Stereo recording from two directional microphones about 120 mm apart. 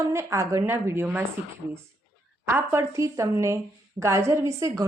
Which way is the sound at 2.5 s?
20° right (ahead or behind).